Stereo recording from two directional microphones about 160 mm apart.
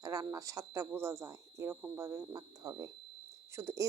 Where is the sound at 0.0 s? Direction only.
20° right (ahead or behind).